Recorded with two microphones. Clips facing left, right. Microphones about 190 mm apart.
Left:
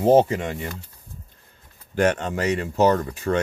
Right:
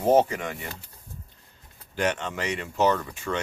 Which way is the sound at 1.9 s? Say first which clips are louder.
Left 6 dB; 45° left (ahead or behind).